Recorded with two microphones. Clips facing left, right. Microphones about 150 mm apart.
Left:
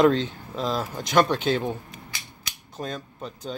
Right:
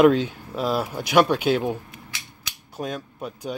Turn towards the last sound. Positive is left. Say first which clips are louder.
# right 3 dB
turn(degrees=-10)  # may be behind; listen again after turning